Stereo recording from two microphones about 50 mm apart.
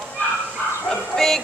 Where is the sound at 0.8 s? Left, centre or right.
Centre.